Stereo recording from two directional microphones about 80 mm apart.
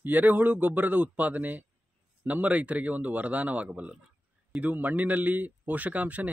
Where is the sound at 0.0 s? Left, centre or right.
Right.